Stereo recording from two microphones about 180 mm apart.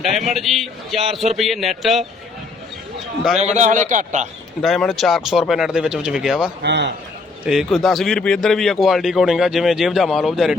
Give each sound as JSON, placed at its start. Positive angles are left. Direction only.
{"t": 0.0, "sound": "a man's voice", "side_deg": 0}
{"t": 3.4, "sound": "a man's voice", "side_deg": -40}
{"t": 4.6, "sound": "a man's voice", "side_deg": 0}
{"t": 6.6, "sound": "a man's voice", "side_deg": -70}
{"t": 7.4, "sound": "a man's voice", "side_deg": -5}